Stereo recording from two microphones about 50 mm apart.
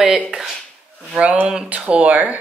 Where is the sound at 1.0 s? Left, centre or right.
Right.